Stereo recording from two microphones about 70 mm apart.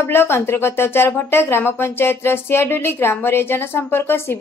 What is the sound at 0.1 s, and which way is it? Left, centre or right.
Speech, left.